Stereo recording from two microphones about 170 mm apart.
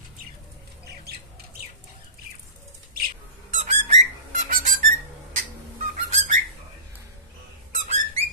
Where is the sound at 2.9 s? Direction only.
60° right (ahead or behind).